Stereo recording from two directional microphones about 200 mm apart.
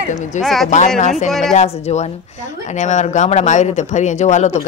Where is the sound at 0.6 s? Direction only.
40° left (ahead or behind).